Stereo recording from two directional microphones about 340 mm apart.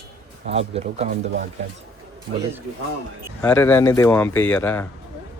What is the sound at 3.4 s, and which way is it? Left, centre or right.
A man's voice, centre.